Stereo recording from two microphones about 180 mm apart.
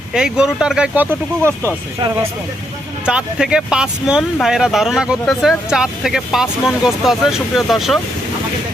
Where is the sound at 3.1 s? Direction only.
5° right (ahead or behind).